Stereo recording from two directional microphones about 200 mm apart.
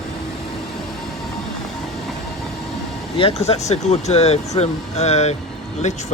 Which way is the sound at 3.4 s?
35° left (ahead or behind).